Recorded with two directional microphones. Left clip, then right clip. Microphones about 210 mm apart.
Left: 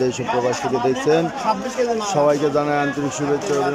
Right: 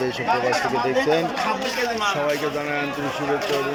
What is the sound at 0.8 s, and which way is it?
A man's voice, 15° left (ahead or behind).